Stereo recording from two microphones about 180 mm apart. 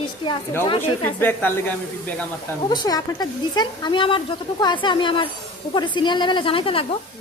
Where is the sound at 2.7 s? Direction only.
20° left (ahead or behind).